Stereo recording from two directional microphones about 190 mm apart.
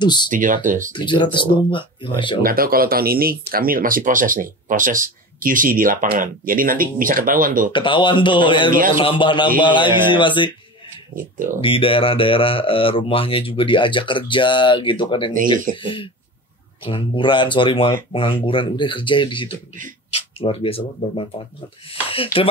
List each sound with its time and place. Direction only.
0.0 s speech: 25° left (ahead or behind)
0.3 s speech: 45° right (ahead or behind)
0.9 s speech: 25° left (ahead or behind)
2.4 s speech: 50° right (ahead or behind)
7.7 s speech: 25° left (ahead or behind)
11.6 s speech: 30° left (ahead or behind)